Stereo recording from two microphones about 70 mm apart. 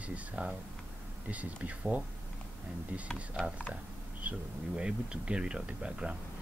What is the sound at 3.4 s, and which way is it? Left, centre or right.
Speech, centre.